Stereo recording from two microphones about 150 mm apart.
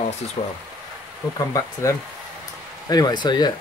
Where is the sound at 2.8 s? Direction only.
25° left (ahead or behind).